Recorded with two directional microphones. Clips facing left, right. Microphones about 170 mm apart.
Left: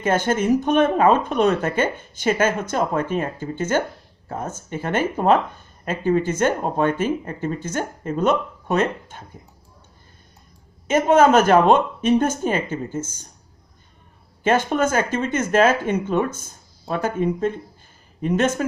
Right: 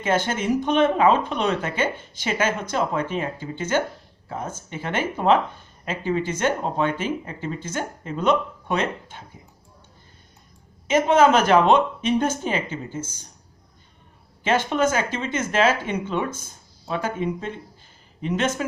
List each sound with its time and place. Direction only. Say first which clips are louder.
0.0 s speech: left 3 dB; 50° left (ahead or behind)
10.8 s speech: left 2 dB; 45° left (ahead or behind)
14.4 s speech: left 2 dB; 50° left (ahead or behind)